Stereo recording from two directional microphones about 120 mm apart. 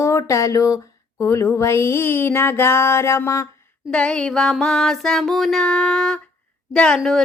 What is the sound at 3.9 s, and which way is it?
Music, 10° left (ahead or behind).